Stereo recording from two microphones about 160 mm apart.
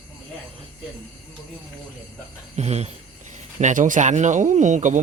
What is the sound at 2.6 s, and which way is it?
Speech, 40° right (ahead or behind).